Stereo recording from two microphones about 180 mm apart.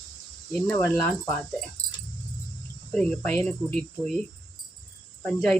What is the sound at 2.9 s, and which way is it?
Speech, 5° left (ahead or behind).